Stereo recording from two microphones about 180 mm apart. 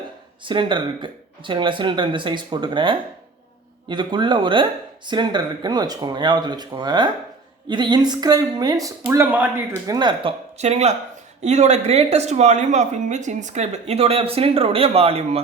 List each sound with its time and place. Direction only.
0.4 s speech: 25° right (ahead or behind)
9.9 s speech: 25° right (ahead or behind)
10.6 s speech: 40° right (ahead or behind)